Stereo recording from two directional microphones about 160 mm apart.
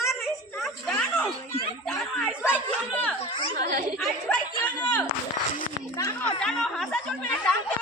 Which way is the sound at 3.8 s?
Centre (ahead or behind).